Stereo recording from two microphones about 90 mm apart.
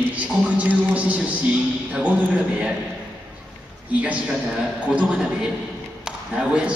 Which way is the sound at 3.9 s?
15° right (ahead or behind).